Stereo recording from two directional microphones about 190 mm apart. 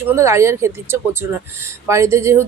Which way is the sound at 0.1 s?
15° right (ahead or behind).